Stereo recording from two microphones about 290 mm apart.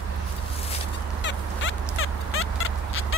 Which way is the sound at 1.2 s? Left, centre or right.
Left.